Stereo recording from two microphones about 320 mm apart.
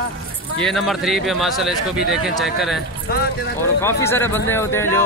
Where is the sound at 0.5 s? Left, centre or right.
Centre.